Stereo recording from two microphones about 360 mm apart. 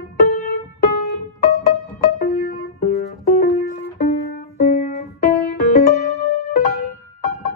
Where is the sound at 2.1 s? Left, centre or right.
Left.